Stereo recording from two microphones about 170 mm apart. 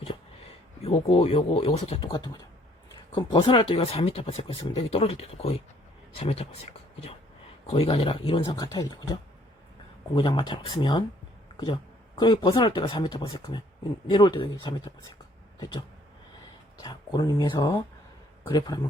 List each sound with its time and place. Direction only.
0.8 s speech: 35° left (ahead or behind)
7.7 s speech: 35° left (ahead or behind)
8.6 s speech: 20° left (ahead or behind)
10.2 s speech: 30° left (ahead or behind)
15.5 s a sound: 25° left (ahead or behind)
16.7 s speech: 25° left (ahead or behind)